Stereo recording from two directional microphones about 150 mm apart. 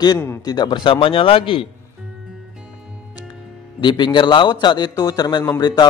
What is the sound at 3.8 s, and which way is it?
Speech, 30° left (ahead or behind).